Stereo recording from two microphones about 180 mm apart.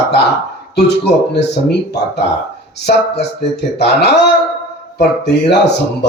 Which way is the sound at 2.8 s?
65° left (ahead or behind).